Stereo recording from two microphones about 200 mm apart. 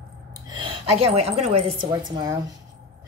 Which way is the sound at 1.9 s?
20° right (ahead or behind).